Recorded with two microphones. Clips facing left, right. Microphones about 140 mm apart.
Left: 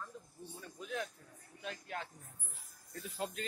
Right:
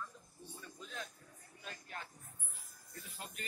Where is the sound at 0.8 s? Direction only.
65° left (ahead or behind).